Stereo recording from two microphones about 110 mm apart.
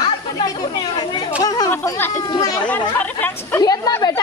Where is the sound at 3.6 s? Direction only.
35° left (ahead or behind).